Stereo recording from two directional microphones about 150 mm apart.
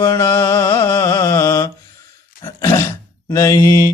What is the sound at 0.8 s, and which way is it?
Mantra, 20° left (ahead or behind).